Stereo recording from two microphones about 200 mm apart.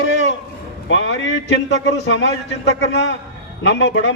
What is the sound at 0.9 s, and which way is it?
A man's voice, 70° left (ahead or behind).